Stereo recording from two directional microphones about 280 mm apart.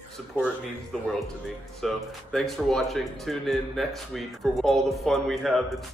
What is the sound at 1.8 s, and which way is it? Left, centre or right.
Speech, centre.